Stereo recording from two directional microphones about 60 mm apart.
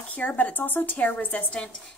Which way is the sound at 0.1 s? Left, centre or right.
Left.